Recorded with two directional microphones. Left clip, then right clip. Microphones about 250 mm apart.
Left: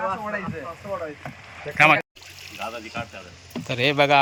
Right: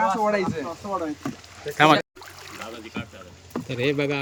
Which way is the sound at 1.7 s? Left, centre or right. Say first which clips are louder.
Left 1 dB; right.